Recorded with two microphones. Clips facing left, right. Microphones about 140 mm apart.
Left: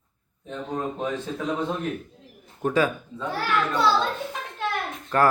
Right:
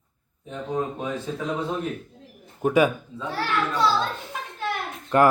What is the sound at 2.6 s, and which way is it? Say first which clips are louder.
Speech: right 3 dB; 15° right (ahead or behind).